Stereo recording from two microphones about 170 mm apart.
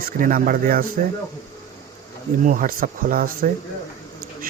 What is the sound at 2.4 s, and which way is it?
Speech, 55° right (ahead or behind).